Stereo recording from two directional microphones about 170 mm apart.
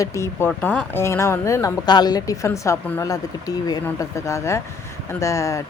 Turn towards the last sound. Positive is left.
turn(degrees=15)  # may be behind; listen again after turning